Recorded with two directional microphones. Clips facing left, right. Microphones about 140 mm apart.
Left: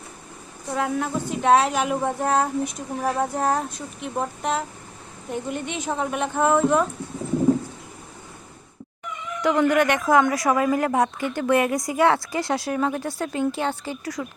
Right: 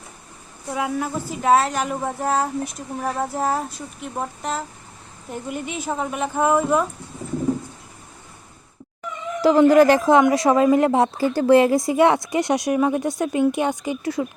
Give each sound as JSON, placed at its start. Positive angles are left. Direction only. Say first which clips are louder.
{"t": 0.7, "sound": "speech", "louder": "even", "side_deg": -5}
{"t": 9.4, "sound": "speech", "louder": "right 6 dB", "side_deg": -30}